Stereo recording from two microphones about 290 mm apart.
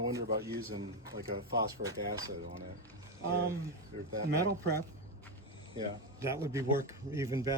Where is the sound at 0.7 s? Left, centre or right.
Centre.